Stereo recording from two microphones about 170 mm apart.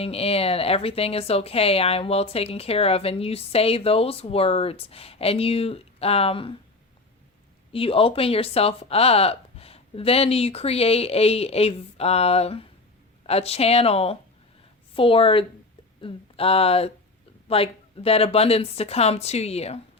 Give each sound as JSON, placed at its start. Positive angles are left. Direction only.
{"t": 0.0, "sound": "a woman's voice", "side_deg": 35}
{"t": 7.7, "sound": "a woman's voice", "side_deg": 35}